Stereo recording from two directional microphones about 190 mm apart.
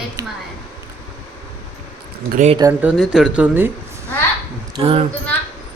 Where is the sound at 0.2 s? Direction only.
20° right (ahead or behind).